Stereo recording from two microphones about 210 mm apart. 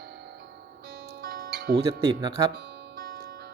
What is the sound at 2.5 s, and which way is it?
Music, 50° right (ahead or behind).